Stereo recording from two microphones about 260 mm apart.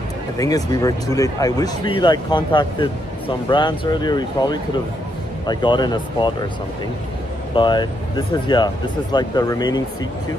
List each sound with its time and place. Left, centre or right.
0.4 s speech: centre
7.5 s speech: centre